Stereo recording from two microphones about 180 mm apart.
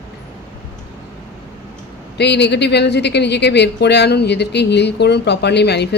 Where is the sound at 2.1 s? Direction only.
70° left (ahead or behind).